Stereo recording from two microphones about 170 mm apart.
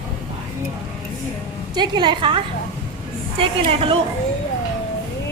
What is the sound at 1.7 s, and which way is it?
A woman's voice, 25° right (ahead or behind).